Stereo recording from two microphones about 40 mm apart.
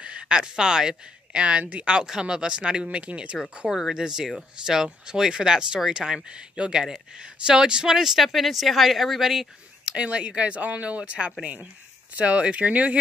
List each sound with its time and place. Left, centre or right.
0.0 s speech: right
1.6 s speech: right
1.9 s speech: centre
3.0 s speech: right
3.3 s a woman's voice: centre
3.9 s speech: centre
6.0 s a woman's voice: centre
6.3 s speech: right
7.9 s a woman's voice: centre
9.8 s speech: right